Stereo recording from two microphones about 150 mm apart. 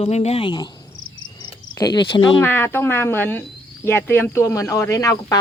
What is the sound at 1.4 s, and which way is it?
Cricket, 25° left (ahead or behind).